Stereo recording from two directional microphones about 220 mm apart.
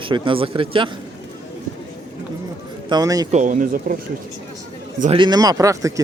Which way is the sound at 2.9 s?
15° right (ahead or behind).